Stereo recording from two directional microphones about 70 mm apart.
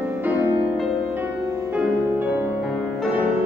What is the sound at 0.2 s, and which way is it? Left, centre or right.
Music, right.